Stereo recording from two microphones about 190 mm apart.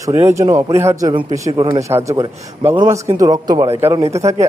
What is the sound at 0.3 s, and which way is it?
A man's voice, 15° right (ahead or behind).